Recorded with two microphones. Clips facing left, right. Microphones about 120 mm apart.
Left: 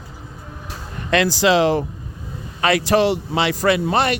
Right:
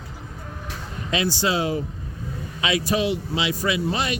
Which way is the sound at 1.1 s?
80° left.